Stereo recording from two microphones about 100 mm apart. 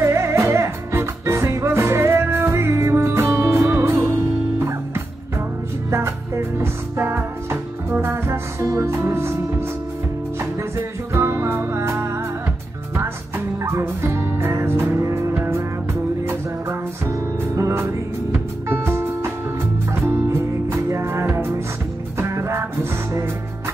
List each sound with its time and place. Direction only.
0.0 s music: 30° right (ahead or behind)
5.9 s music: 30° right (ahead or behind)
11.1 s music: 25° right (ahead or behind)
13.6 s music: 30° right (ahead or behind)